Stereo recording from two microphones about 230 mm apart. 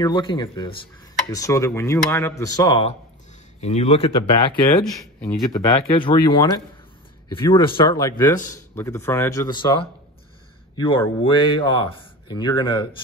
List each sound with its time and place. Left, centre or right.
0.0 s a man's voice: left
5.2 s a man's voice: centre